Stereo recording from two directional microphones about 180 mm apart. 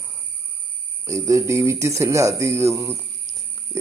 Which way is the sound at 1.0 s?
15° right (ahead or behind).